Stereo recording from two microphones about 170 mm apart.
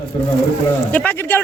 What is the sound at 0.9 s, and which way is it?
Speech, 10° left (ahead or behind).